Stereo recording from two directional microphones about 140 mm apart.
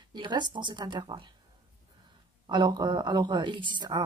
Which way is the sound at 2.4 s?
30° right (ahead or behind).